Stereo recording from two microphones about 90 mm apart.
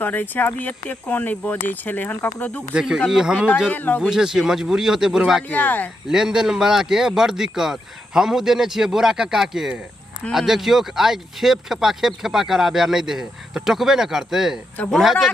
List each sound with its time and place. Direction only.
0.0 s speech: 20° left (ahead or behind)
2.7 s speech: 5° right (ahead or behind)
3.7 s speech: 20° left (ahead or behind)
4.1 s speech: 5° right (ahead or behind)
5.5 s speech: 20° left (ahead or behind)
6.0 s speech: 5° right (ahead or behind)